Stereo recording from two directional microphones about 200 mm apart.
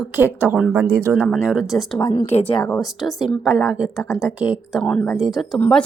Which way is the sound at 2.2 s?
30° left (ahead or behind).